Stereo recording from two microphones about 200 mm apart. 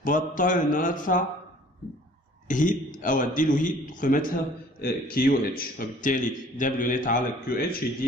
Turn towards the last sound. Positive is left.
turn(degrees=45)  # may be behind; listen again after turning